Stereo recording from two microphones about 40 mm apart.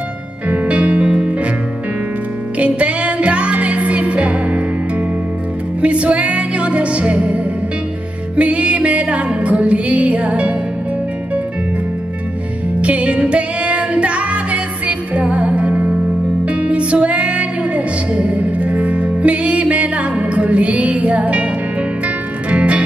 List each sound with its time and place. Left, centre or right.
0.5 s music: right
2.6 s music: right
5.8 s music: right
12.8 s music: right